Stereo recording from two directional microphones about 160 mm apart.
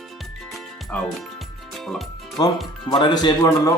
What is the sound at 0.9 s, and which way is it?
Speech, 5° left (ahead or behind).